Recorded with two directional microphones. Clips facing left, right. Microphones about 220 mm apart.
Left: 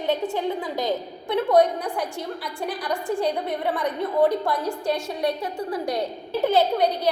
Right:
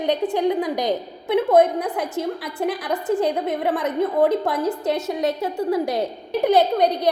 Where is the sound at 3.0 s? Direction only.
20° right (ahead or behind).